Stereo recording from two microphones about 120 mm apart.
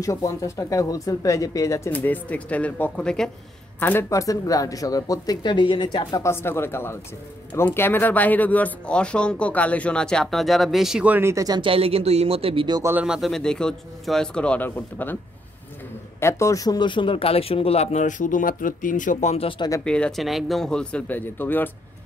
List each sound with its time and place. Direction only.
0.0 s speech: 25° left (ahead or behind)
1.9 s speech: 15° left (ahead or behind)
4.1 s speech: 30° left (ahead or behind)
6.2 s speech: 20° left (ahead or behind); by 11.1 s 5° right (ahead or behind)
11.1 s speech: 25° right (ahead or behind)
11.6 s speech: 50° right (ahead or behind)
13.0 s a man's voice: 5° right (ahead or behind); by 15.1 s 15° left (ahead or behind)
16.2 s speech: 25° left (ahead or behind); by 19.4 s 75° left (ahead or behind)
19.8 s speech: 10° left (ahead or behind)